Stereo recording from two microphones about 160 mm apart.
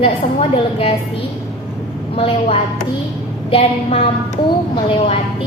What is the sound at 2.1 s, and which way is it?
A woman's voice, 35° left (ahead or behind).